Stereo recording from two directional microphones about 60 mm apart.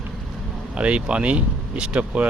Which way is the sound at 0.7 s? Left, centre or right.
Right.